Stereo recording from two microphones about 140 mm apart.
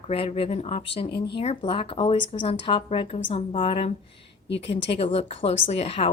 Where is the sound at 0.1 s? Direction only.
45° left (ahead or behind).